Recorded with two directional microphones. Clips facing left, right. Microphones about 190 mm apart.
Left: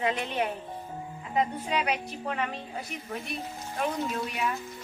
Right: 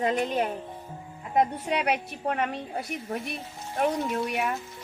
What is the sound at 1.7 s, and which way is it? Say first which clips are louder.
Speech: right 2 dB; 55° right (ahead or behind).